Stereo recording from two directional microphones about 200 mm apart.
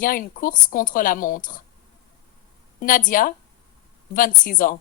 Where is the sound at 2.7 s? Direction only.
45° left (ahead or behind).